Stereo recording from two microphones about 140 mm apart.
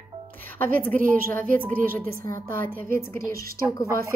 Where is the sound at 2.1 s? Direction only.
20° left (ahead or behind).